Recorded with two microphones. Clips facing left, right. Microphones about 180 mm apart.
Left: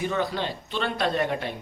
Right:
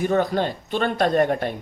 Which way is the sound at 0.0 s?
50° right (ahead or behind).